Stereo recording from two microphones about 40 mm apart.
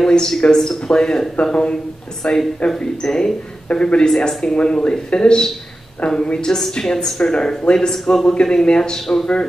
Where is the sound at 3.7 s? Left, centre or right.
Left.